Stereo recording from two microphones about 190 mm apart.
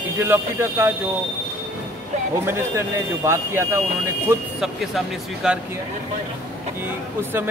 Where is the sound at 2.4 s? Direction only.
15° right (ahead or behind).